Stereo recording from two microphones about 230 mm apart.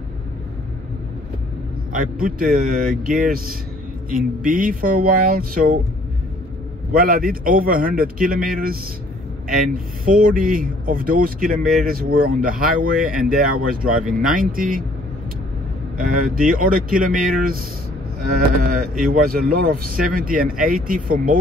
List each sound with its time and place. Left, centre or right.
1.9 s speech: right
6.9 s speech: right
10.0 s speech: right
16.0 s speech: right
18.6 s speech: right